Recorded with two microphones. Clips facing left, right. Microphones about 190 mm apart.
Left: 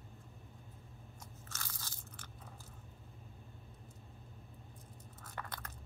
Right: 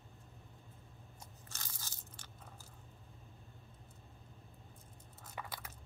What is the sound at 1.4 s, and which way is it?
Crunch, 15° right (ahead or behind).